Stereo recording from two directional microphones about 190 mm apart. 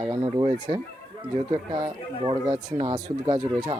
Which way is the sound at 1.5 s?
25° right (ahead or behind).